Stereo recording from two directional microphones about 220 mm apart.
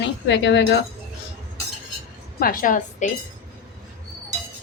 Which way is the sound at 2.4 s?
40° left (ahead or behind).